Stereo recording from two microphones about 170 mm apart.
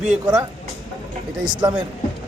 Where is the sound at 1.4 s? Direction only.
25° right (ahead or behind).